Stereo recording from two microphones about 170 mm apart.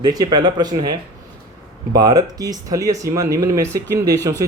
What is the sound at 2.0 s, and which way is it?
Speech, 20° right (ahead or behind).